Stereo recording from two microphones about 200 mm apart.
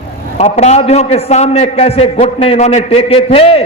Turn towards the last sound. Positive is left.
turn(degrees=30)  # may be behind; listen again after turning